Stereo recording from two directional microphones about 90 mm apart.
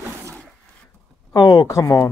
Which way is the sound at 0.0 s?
35° right (ahead or behind).